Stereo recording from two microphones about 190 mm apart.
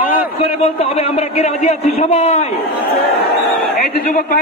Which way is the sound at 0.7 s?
30° left (ahead or behind).